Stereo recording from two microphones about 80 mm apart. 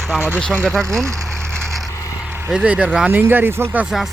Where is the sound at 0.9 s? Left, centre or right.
Right.